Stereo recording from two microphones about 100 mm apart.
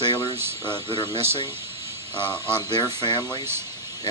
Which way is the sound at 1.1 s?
90° right.